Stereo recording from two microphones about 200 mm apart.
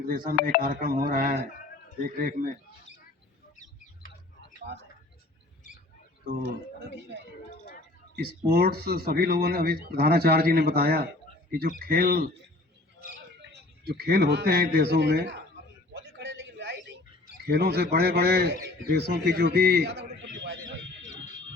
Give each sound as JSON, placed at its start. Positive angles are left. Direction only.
{"t": 0.1, "sound": "a man's voice", "side_deg": -45}
{"t": 3.6, "sound": "a sound", "side_deg": 45}
{"t": 6.4, "sound": "a man's voice", "side_deg": -55}
{"t": 13.5, "sound": "a man's voice", "side_deg": -55}
{"t": 16.1, "sound": "a sound", "side_deg": -65}
{"t": 17.4, "sound": "a man's voice", "side_deg": -55}